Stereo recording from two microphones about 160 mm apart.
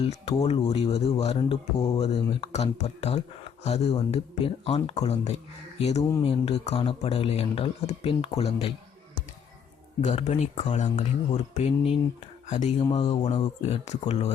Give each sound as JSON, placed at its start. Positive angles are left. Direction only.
{"t": 0.0, "sound": "speech", "side_deg": 40}
{"t": 6.0, "sound": "speech", "side_deg": 20}
{"t": 6.2, "sound": "speech", "side_deg": 40}
{"t": 10.0, "sound": "speech", "side_deg": 45}